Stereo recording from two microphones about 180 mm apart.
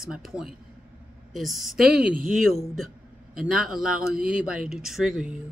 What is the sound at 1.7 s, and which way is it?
Speech, 55° right (ahead or behind).